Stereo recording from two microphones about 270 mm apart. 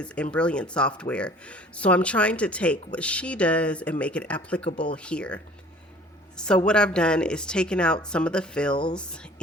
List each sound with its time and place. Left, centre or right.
0.0 s speech: centre
8.7 s speech: centre
9.0 s speech: centre